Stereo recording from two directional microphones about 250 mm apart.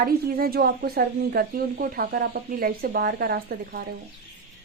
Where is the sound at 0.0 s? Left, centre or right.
Right.